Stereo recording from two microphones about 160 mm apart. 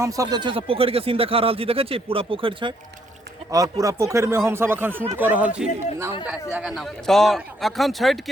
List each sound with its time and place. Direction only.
0.0 s speech: 20° right (ahead or behind)
3.5 s speech: 20° right (ahead or behind); by 8.2 s centre (ahead or behind)